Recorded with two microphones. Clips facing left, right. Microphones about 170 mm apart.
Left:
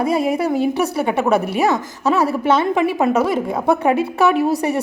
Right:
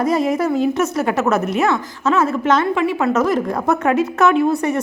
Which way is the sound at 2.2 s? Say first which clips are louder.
Even; 10° left (ahead or behind).